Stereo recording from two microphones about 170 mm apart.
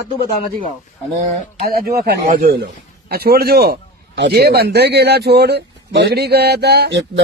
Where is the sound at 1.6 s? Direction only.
65° right (ahead or behind); by 7.2 s 90° right.